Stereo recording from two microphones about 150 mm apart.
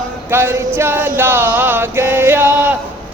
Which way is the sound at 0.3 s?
15° right (ahead or behind).